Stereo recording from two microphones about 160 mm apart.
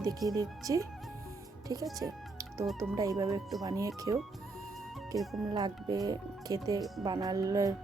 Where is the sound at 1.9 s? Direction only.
20° right (ahead or behind).